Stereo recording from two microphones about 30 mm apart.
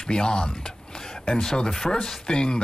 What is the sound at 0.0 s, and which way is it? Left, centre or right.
Speech, left.